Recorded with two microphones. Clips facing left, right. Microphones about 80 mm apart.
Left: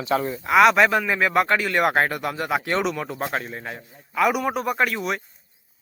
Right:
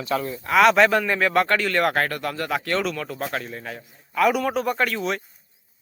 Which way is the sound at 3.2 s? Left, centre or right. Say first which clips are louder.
Left 2 dB; centre.